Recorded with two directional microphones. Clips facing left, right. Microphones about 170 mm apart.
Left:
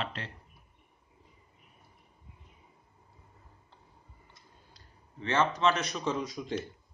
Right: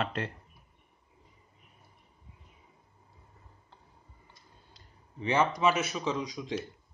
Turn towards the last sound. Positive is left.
turn(degrees=0)  # may be behind; listen again after turning